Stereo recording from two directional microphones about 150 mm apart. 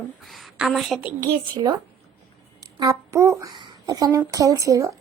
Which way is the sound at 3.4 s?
30° right (ahead or behind).